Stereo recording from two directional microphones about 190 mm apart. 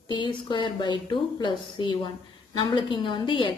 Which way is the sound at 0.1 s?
25° left (ahead or behind).